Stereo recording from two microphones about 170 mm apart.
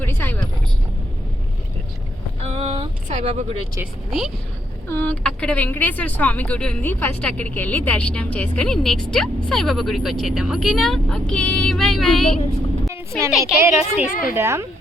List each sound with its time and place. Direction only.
0.0 s vehicle: 10° left (ahead or behind)
2.5 s a sound: 35° right (ahead or behind)
4.9 s speech: 10° left (ahead or behind)
12.9 s a sound: 15° right (ahead or behind)
13.4 s a woman's voice: 10° right (ahead or behind)
14.1 s a woman's voice: 55° left (ahead or behind)
14.3 s a woman's voice: 15° right (ahead or behind)